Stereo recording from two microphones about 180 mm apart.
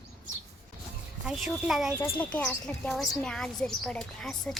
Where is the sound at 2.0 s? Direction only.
10° left (ahead or behind).